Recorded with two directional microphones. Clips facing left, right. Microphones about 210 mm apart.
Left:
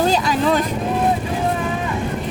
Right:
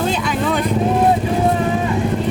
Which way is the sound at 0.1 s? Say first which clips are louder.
Left 2 dB; 40° left (ahead or behind).